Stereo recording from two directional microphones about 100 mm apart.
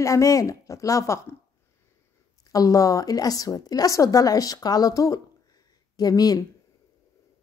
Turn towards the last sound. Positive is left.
turn(degrees=40)  # may be behind; listen again after turning